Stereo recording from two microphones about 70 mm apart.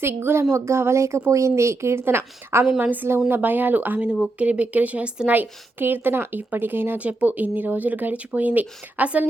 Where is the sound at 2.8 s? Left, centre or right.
Right.